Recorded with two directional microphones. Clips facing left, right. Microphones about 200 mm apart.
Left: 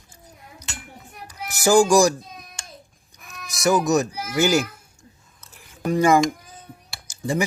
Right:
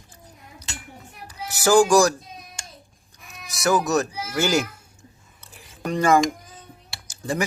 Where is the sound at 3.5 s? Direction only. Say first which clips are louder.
Left 2 dB; 15° left (ahead or behind).